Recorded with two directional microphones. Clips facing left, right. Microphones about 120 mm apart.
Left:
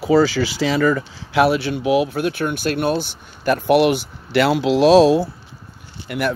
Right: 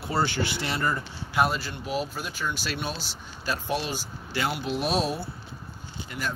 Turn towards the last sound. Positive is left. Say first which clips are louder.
# left 11 dB
turn(degrees=65)  # may be behind; listen again after turning